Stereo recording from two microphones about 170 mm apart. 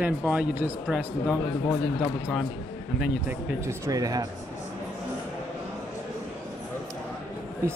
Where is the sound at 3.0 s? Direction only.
10° right (ahead or behind).